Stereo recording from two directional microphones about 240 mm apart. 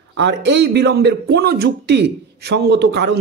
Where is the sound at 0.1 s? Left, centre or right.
Right.